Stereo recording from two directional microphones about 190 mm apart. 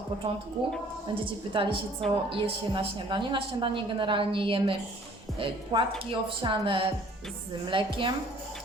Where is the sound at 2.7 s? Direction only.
25° right (ahead or behind).